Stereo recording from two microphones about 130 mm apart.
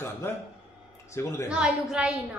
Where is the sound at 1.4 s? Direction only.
5° right (ahead or behind).